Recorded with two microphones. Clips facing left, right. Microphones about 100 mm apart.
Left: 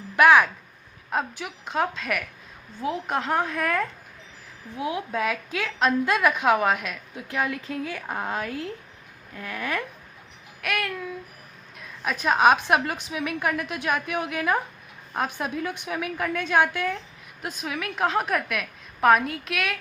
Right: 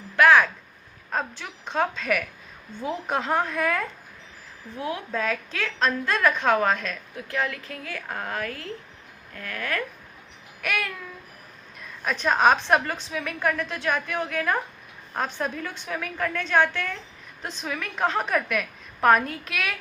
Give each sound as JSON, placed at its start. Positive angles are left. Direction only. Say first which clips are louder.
{"t": 0.2, "sound": "a woman's voice", "louder": "left 1 dB", "side_deg": 15}
{"t": 4.8, "sound": "a woman's voice", "louder": "left 2 dB", "side_deg": 15}
{"t": 10.6, "sound": "a woman's voice", "louder": "left 1 dB", "side_deg": 0}